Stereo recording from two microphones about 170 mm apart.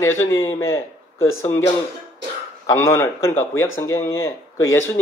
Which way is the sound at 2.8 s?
15° left (ahead or behind).